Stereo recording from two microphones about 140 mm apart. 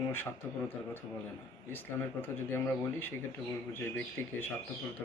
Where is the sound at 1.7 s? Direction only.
15° left (ahead or behind).